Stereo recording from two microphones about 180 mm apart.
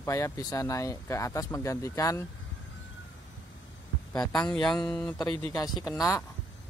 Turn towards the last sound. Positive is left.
turn(degrees=15)  # may be behind; listen again after turning